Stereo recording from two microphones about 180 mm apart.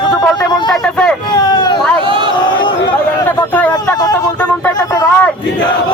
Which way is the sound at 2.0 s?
25° right (ahead or behind).